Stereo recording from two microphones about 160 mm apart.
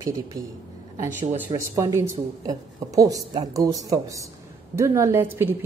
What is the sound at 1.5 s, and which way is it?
A woman's voice, 15° right (ahead or behind).